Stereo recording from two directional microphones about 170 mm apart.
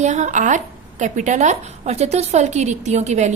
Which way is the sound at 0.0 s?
45° right (ahead or behind).